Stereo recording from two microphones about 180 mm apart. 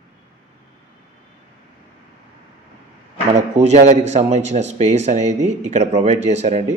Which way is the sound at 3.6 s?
40° right (ahead or behind).